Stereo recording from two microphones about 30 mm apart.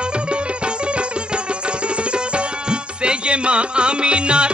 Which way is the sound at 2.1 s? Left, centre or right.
Right.